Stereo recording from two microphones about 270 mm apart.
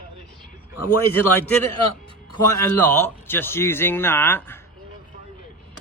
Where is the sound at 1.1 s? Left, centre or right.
Centre.